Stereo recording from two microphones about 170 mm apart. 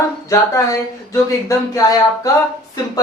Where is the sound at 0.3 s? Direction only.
20° left (ahead or behind).